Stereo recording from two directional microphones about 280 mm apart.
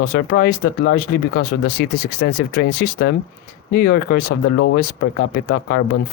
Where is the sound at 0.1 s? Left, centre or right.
Left.